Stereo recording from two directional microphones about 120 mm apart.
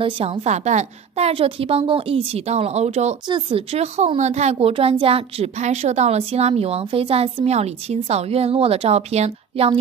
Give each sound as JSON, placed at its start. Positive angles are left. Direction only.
{"t": 0.0, "sound": "a woman's voice", "side_deg": -55}
{"t": 3.3, "sound": "a woman's voice", "side_deg": -45}